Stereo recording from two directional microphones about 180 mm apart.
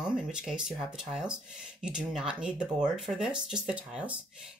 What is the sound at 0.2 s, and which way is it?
Speech, 5° right (ahead or behind).